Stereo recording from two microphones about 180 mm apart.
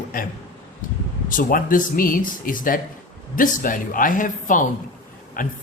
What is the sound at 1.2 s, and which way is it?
Speech, 50° left (ahead or behind).